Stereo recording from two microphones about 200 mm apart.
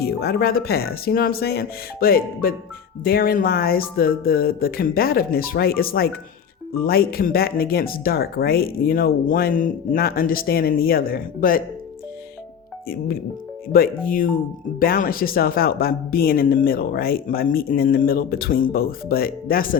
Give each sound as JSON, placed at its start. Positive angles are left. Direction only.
{"t": 0.0, "sound": "speech", "side_deg": 50}
{"t": 13.7, "sound": "speech", "side_deg": 45}